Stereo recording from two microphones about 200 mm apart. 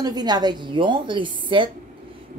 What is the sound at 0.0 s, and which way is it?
Speech, 20° right (ahead or behind).